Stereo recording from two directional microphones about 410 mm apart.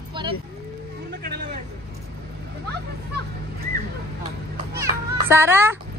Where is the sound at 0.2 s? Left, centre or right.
Centre.